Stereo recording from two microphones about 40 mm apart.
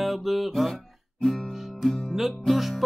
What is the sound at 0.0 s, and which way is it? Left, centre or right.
Music, centre.